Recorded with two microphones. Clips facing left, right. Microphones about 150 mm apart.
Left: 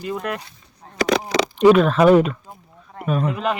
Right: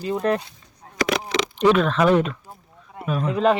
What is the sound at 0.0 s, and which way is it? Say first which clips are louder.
Speech: right 4 dB; 30° right (ahead or behind).